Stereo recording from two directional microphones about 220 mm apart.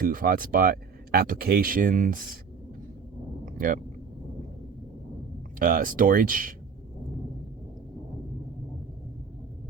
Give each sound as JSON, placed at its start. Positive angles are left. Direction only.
{"t": 0.0, "sound": "speech", "side_deg": -40}
{"t": 5.5, "sound": "speech", "side_deg": -40}